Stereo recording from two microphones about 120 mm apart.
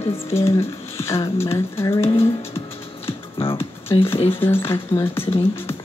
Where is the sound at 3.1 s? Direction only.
50° left (ahead or behind).